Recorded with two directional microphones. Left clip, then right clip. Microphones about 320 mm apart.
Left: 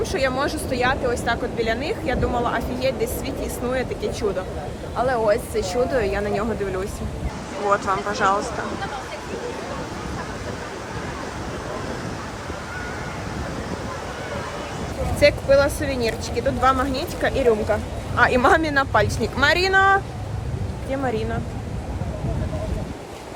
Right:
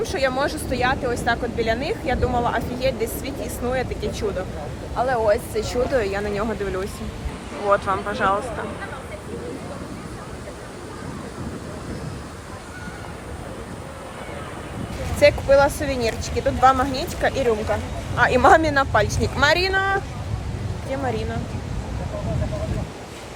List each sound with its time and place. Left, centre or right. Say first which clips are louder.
0.0 s speech: even; centre
15.2 s speech: right 1 dB; centre